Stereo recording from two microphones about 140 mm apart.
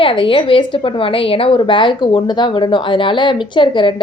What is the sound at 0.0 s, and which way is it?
A woman's voice, 40° left (ahead or behind).